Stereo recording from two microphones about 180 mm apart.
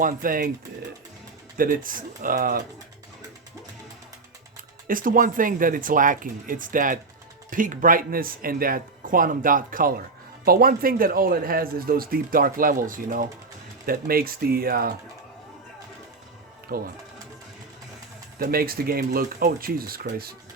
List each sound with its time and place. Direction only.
0.0 s a man's voice: 50° right (ahead or behind)
1.5 s a man's voice: 50° right (ahead or behind)
4.9 s a man's voice: 50° right (ahead or behind)
16.6 s speech: 55° right (ahead or behind)
18.3 s a man's voice: 55° right (ahead or behind)